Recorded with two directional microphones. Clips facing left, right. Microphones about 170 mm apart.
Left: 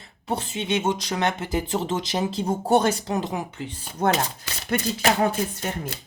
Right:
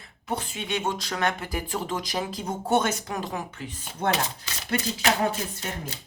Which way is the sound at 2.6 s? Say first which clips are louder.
Left 3 dB; 35° left (ahead or behind).